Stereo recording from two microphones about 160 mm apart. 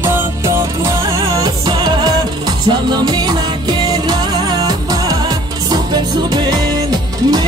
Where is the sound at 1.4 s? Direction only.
30° right (ahead or behind).